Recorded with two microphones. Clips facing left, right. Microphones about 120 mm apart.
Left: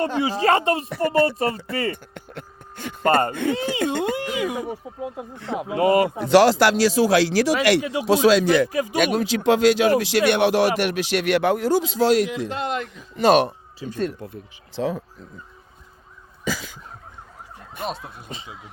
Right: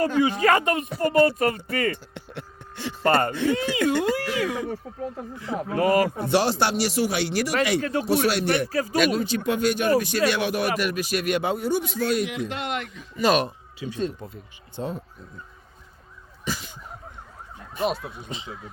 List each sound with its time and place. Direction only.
0.0 s speech: 30° left (ahead or behind)
2.1 s a sound: 50° left (ahead or behind)
3.5 s speech: 30° left (ahead or behind)
6.1 s speech: 90° left
7.8 s speech: 10° left (ahead or behind)
8.0 s speech: 90° left
8.7 s speech: 15° left (ahead or behind)
9.0 s speech: 80° left
12.5 s speech: 30° left (ahead or behind)
12.9 s speech: 65° left (ahead or behind)
13.7 s speech: 45° left (ahead or behind)
14.8 s speech: 90° left
17.7 s speech: centre (ahead or behind)